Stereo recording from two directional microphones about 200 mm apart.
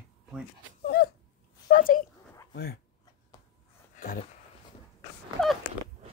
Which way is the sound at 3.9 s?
45° left (ahead or behind).